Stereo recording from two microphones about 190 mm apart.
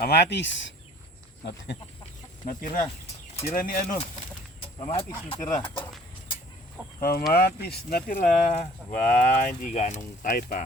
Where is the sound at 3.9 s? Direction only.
30° left (ahead or behind).